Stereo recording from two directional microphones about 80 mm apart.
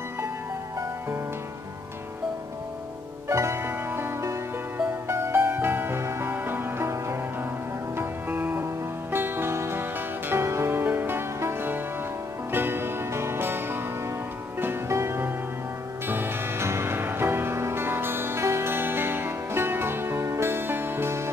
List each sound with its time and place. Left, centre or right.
3.3 s music: right